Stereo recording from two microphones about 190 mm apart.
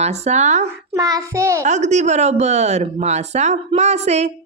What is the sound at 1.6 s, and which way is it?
A woman's voice, 35° right (ahead or behind).